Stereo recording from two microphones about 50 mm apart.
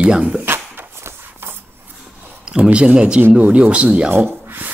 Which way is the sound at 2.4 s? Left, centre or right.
Right.